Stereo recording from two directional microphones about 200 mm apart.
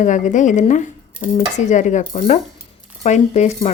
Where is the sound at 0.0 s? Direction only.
40° left (ahead or behind).